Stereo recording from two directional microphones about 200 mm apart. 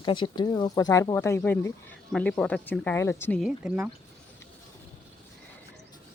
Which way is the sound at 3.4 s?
5° right (ahead or behind).